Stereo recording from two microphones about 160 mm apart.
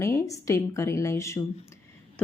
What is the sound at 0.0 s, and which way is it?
A woman's voice, 20° left (ahead or behind).